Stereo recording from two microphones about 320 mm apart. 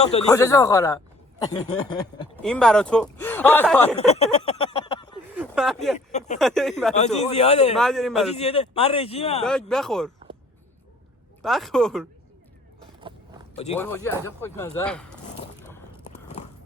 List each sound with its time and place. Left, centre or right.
0.0 s speech: centre
2.3 s speech: centre
3.9 s a sound: centre
5.3 s a sound: centre
6.1 s a man's voice: left
6.4 s speech: centre
6.9 s a man's voice: left
7.8 s speech: centre
8.4 s speech: centre
9.4 s speech: centre
11.4 s speech: centre
13.0 s a sound: centre
13.7 s speech: centre